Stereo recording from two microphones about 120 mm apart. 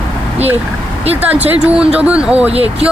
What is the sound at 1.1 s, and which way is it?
A woman's voice, 15° right (ahead or behind).